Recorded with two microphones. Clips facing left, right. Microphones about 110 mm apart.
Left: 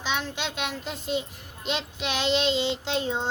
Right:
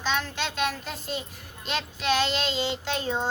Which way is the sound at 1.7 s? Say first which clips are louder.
Right 3 dB; 20° left (ahead or behind).